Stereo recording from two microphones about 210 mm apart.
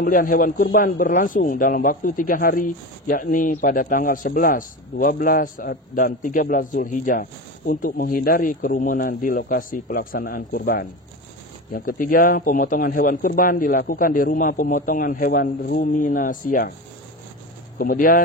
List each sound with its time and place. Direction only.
0.0 s a man's voice: 40° left (ahead or behind)
17.7 s a man's voice: 40° left (ahead or behind)